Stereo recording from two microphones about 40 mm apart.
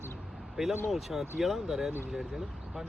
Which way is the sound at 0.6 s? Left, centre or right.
Centre.